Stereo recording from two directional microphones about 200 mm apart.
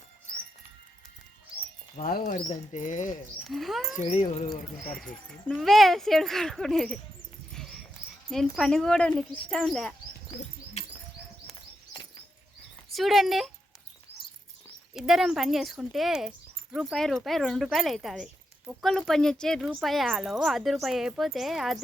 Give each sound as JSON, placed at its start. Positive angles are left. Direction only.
{"t": 2.0, "sound": "speech", "side_deg": 45}
{"t": 3.4, "sound": "speech", "side_deg": 0}
{"t": 3.9, "sound": "speech", "side_deg": 35}
{"t": 5.5, "sound": "speech", "side_deg": 0}
{"t": 7.5, "sound": "dog", "side_deg": 5}
{"t": 8.3, "sound": "speech", "side_deg": 0}
{"t": 12.9, "sound": "speech", "side_deg": 0}
{"t": 14.9, "sound": "speech", "side_deg": 0}